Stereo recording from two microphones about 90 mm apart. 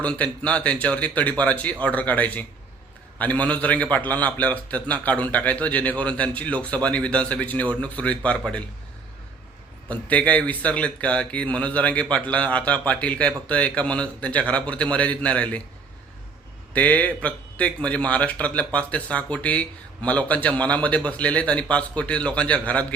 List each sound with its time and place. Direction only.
0.0 s speech: 15° left (ahead or behind)
9.9 s speech: 15° left (ahead or behind)
16.7 s speech: 15° left (ahead or behind)